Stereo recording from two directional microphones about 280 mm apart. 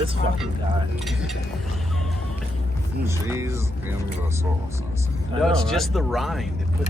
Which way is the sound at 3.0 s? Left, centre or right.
Centre.